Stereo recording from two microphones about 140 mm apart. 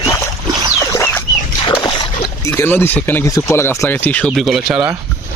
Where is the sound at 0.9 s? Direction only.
15° left (ahead or behind).